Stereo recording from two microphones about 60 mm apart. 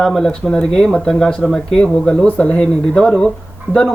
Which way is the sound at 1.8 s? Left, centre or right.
Centre.